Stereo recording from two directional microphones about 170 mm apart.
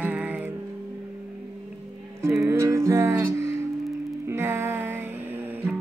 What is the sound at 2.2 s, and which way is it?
Music, 15° right (ahead or behind).